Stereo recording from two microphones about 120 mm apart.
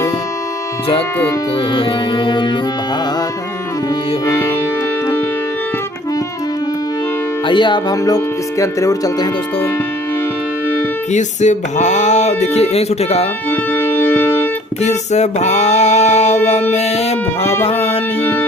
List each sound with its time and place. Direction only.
1.7 s speech: 45° left (ahead or behind)
4.3 s music: 20° left (ahead or behind)
7.4 s speech: 40° left (ahead or behind)
11.1 s speech: 80° left; by 13.2 s 60° left (ahead or behind)
13.5 s music: 20° left (ahead or behind)
14.8 s music: 70° left (ahead or behind); by 18.0 s 55° left (ahead or behind)
18.2 s music: 20° left (ahead or behind)